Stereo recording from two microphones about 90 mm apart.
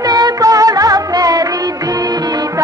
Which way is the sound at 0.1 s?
45° right (ahead or behind).